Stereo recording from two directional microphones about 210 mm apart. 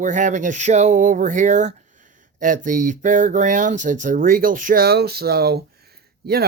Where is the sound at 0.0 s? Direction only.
35° right (ahead or behind).